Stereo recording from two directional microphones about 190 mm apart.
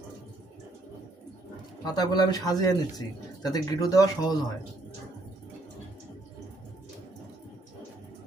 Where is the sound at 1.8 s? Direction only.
20° left (ahead or behind).